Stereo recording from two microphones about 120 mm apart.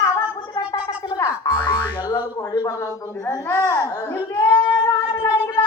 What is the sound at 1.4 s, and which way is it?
Music, 30° left (ahead or behind).